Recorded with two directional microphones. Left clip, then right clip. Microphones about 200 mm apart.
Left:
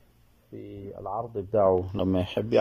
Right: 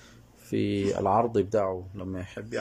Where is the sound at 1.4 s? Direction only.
Centre (ahead or behind).